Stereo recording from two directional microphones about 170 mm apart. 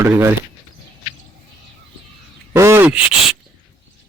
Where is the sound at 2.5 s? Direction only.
15° right (ahead or behind).